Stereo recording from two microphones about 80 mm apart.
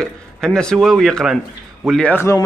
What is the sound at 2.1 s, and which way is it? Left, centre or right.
Speech, left.